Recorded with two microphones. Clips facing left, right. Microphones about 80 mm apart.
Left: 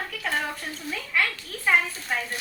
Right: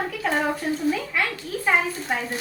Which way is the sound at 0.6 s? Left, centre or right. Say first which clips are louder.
Right 10 dB; centre.